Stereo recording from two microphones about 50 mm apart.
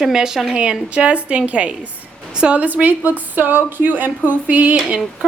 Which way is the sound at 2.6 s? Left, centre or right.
Right.